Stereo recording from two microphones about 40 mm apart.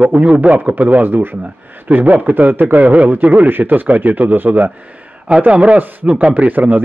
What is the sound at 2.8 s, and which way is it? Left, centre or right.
Speech, right.